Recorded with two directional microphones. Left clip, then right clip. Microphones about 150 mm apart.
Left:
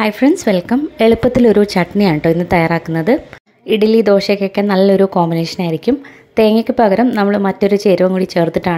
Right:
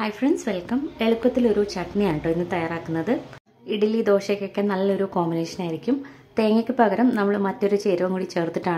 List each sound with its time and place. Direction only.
0.0 s a woman's voice: 45° left (ahead or behind)